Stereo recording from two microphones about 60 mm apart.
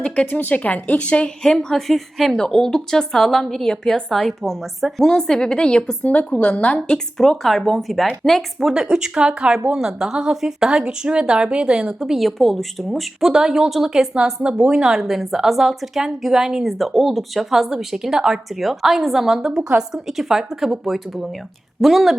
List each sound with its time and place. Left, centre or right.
0.3 s a woman's voice: left
1.4 s a woman's voice: centre
6.0 s a woman's voice: left
6.9 s a woman's voice: centre
8.7 s a woman's voice: centre